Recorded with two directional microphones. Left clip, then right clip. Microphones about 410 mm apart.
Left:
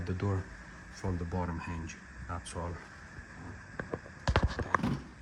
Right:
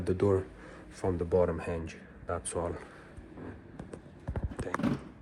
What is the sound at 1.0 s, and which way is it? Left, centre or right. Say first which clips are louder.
Speech: right 7 dB; right.